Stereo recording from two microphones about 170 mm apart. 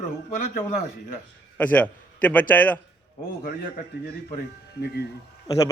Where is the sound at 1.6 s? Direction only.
10° left (ahead or behind).